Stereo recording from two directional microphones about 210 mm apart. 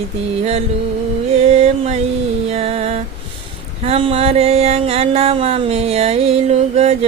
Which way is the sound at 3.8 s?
25° right (ahead or behind).